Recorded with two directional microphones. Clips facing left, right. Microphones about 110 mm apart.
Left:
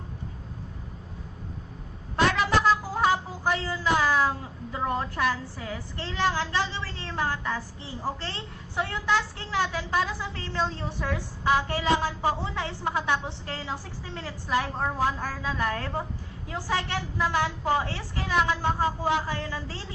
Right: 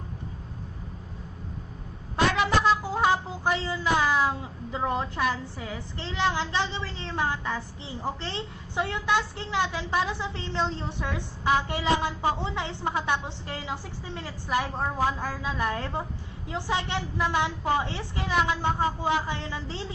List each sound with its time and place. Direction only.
2.8 s music: 20° right (ahead or behind)
4.7 s a woman's voice: 20° right (ahead or behind)